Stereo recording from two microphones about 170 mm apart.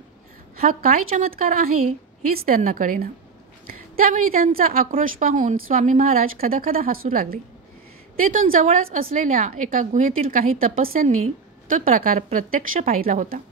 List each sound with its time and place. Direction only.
0.6 s a woman's voice: 55° right (ahead or behind)